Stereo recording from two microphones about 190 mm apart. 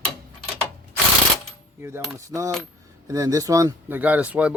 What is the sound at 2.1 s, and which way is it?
Speech, 15° right (ahead or behind).